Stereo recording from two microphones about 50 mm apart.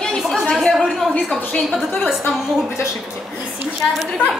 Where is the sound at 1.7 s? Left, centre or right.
Centre.